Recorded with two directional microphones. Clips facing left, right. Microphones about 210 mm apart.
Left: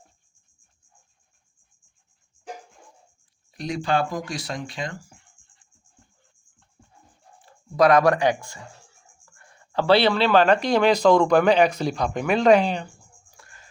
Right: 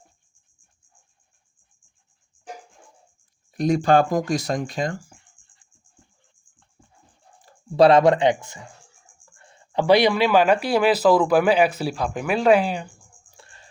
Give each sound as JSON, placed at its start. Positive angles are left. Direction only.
{"t": 3.5, "sound": "speech", "side_deg": -45}
{"t": 7.4, "sound": "speech", "side_deg": -30}
{"t": 13.3, "sound": "chicken", "side_deg": -30}